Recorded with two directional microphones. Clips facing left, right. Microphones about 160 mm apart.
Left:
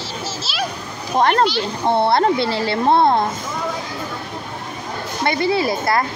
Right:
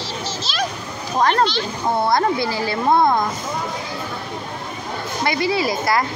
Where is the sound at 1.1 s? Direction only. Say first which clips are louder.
Left 2 dB; 35° left (ahead or behind).